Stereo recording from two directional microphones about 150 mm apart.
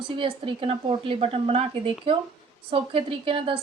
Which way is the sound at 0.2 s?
35° right (ahead or behind).